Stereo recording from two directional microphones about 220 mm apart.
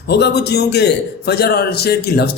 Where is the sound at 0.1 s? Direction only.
50° left (ahead or behind).